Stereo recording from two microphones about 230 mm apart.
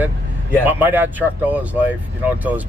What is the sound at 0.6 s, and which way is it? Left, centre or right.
Speech, centre.